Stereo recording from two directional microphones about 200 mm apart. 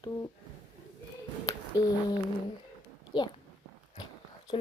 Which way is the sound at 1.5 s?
20° left (ahead or behind).